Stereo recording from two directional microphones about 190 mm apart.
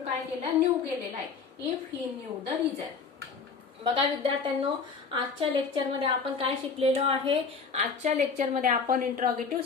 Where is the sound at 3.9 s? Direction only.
25° right (ahead or behind).